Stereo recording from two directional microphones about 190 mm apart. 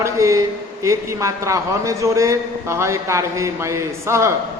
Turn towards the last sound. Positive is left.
turn(degrees=-15)  # may be behind; listen again after turning